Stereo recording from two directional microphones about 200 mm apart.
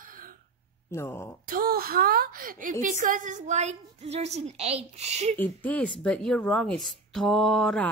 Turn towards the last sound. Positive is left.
turn(degrees=5)  # may be behind; listen again after turning